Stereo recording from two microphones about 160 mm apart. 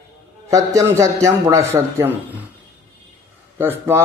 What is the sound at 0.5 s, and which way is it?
A man's voice, 20° right (ahead or behind).